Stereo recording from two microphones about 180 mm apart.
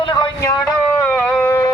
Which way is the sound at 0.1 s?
25° left (ahead or behind).